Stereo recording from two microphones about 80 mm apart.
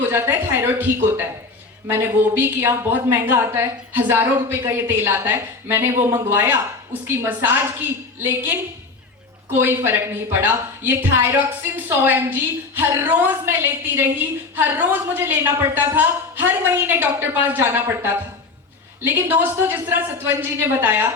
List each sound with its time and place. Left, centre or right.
0.0 s a woman's voice: right